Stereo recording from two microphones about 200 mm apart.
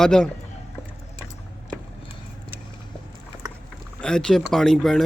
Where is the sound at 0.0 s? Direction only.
5° left (ahead or behind).